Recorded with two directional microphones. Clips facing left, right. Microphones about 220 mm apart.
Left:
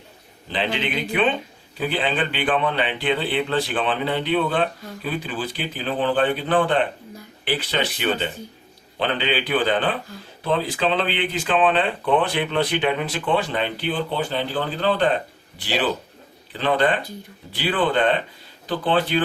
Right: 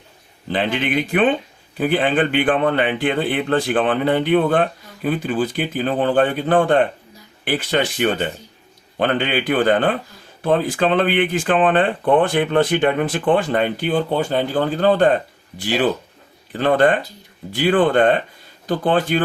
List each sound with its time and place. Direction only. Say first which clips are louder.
0.5 s speech: right 5 dB; 50° right (ahead or behind)